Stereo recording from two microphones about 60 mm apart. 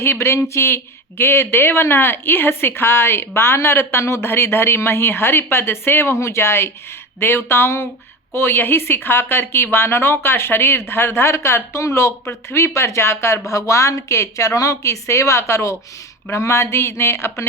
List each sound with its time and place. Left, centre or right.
0.0 s a woman's voice: left
13.5 s speech: left